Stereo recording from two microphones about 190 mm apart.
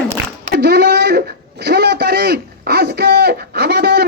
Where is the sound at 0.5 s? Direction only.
60° right (ahead or behind).